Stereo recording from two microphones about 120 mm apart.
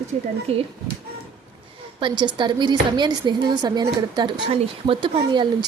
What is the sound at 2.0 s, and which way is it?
A woman's voice, 40° right (ahead or behind).